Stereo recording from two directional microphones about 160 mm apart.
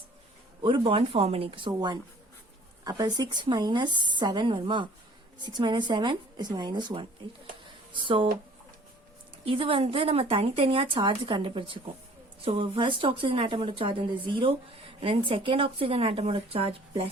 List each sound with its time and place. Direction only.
0.6 s speech: 30° right (ahead or behind)
9.4 s speech: 35° right (ahead or behind)